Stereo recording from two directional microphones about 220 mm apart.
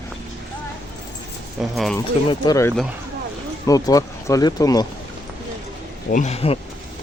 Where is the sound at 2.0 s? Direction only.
20° left (ahead or behind).